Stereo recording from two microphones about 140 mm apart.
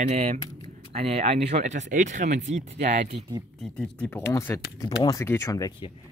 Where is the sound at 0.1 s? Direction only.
50° right (ahead or behind).